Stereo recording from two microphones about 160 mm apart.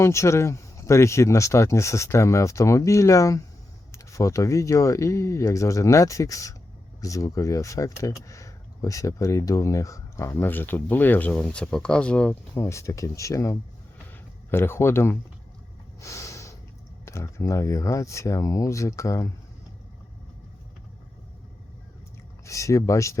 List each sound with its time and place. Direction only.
0.0 s speech: 20° left (ahead or behind)
14.1 s a sound: 15° left (ahead or behind)
16.0 s snort: 20° left (ahead or behind)
17.1 s speech: 15° left (ahead or behind)
22.4 s speech: 20° left (ahead or behind)